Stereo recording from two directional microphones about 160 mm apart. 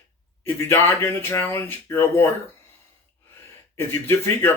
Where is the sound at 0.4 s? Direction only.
10° left (ahead or behind).